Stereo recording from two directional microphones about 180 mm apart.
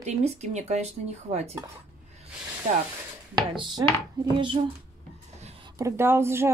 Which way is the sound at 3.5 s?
25° right (ahead or behind).